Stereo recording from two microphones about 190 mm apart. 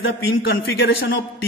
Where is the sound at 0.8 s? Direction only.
70° left (ahead or behind).